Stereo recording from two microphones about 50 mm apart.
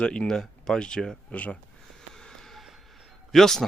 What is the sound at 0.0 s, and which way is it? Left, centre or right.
Speech, left.